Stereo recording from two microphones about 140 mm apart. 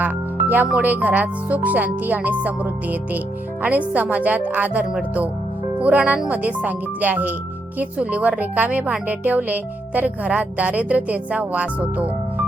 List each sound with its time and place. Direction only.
0.0 s speech: 15° right (ahead or behind)